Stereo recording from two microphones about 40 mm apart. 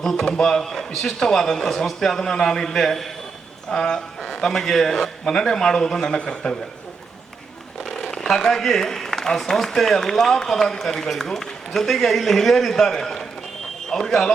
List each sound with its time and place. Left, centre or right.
0.4 s speech: centre
3.7 s a man's voice: centre
8.1 s speech: centre